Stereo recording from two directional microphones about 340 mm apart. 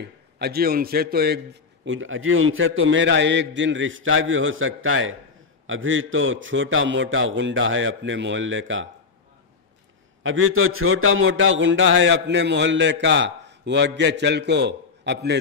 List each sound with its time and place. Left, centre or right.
0.0 s a man's voice: right
10.2 s a man's voice: right